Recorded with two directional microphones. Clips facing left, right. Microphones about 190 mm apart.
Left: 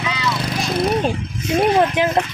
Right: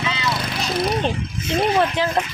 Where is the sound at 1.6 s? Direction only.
15° left (ahead or behind).